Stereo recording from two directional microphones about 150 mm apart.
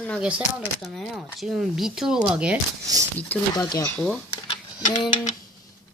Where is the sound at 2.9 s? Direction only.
25° right (ahead or behind).